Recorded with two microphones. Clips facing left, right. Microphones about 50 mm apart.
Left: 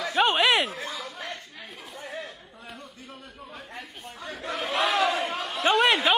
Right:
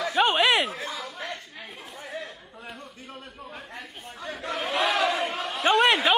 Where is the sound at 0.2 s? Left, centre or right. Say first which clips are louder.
Even; centre.